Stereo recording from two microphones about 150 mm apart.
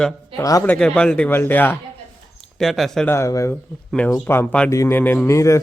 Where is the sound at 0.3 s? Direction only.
25° left (ahead or behind).